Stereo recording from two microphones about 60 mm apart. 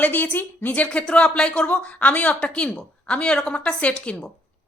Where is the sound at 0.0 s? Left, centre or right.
Left.